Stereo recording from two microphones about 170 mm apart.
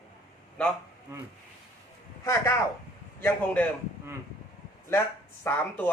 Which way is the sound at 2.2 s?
15° left (ahead or behind).